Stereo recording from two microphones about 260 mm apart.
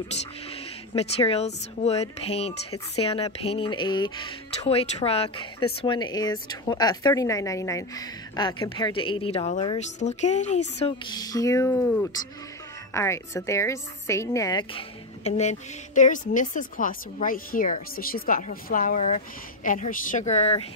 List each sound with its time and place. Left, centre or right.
0.9 s a woman's voice: left